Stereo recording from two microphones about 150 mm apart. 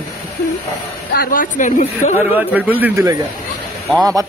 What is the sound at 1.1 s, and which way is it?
Speech, 80° left.